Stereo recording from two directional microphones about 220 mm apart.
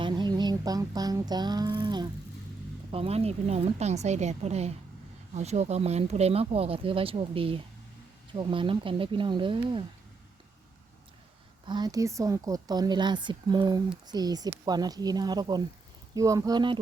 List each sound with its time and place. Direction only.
0.0 s music: 20° right (ahead or behind)
2.9 s speech: 25° right (ahead or behind)
11.6 s speech: 20° right (ahead or behind)